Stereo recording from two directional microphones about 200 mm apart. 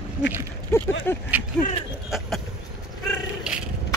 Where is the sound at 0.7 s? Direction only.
10° left (ahead or behind).